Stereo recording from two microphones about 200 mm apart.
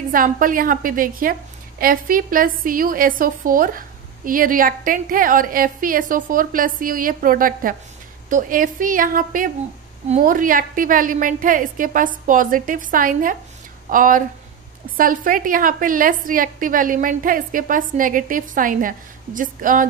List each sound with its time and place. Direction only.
0.1 s a woman's voice: 45° right (ahead or behind)